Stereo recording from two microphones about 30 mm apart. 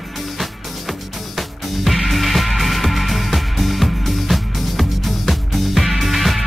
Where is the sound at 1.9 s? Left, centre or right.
Centre.